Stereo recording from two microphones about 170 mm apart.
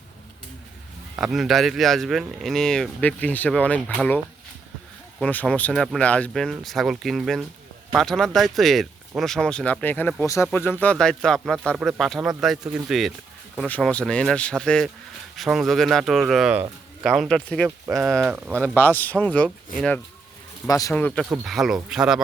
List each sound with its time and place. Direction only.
1.2 s speech: centre (ahead or behind)
5.2 s speech: 10° left (ahead or behind)
17.8 s speech: 15° right (ahead or behind)
18.7 s speech: 10° left (ahead or behind)
20.7 s speech: 20° left (ahead or behind)
20.9 s speech: 10° left (ahead or behind)